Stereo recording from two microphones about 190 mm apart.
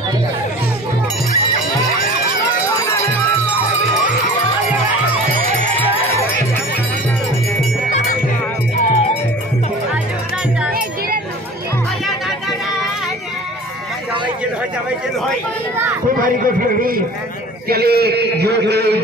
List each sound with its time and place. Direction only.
5.4 s music: 45° right (ahead or behind)
8.8 s music: 35° left (ahead or behind)
16.2 s music: 45° right (ahead or behind)
17.6 s a man's voice: 55° right (ahead or behind)